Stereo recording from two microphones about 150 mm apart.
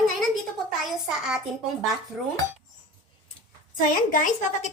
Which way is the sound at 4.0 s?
60° left (ahead or behind).